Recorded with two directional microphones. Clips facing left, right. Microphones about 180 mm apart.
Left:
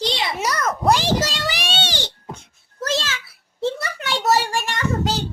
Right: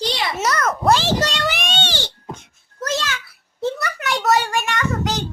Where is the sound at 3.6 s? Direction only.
25° left (ahead or behind).